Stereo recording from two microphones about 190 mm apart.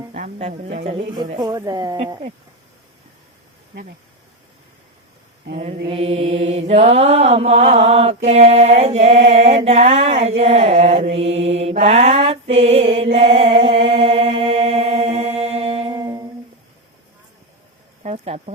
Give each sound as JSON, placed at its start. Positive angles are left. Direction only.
{"t": 0.1, "sound": "music", "side_deg": -35}
{"t": 1.1, "sound": "speech", "side_deg": -25}
{"t": 5.9, "sound": "mantra", "side_deg": -30}
{"t": 18.0, "sound": "a sound", "side_deg": -35}